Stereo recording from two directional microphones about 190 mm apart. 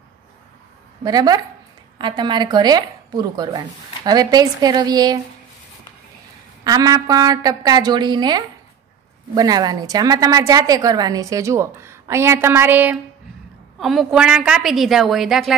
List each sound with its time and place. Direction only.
1.0 s speech: 20° right (ahead or behind)
6.6 s a woman's voice: 20° right (ahead or behind); by 15.5 s centre (ahead or behind)